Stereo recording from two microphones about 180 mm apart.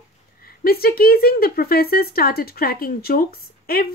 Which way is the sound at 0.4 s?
55° left (ahead or behind).